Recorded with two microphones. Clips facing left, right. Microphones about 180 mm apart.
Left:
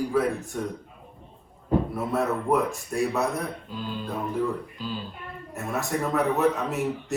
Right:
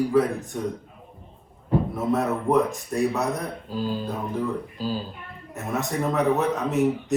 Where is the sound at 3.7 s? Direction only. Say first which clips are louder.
Right 5 dB; 35° right (ahead or behind).